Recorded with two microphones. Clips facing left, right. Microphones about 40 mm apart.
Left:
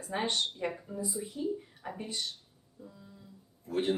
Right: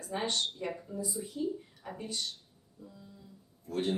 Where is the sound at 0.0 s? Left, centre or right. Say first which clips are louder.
Left 1 dB; centre.